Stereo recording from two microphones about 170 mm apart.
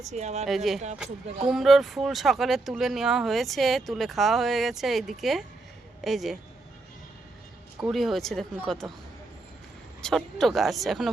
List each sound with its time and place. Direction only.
0.1 s speech: 40° right (ahead or behind)
0.4 s speech: centre (ahead or behind)
7.9 s speech: centre (ahead or behind)
10.0 s speech: centre (ahead or behind)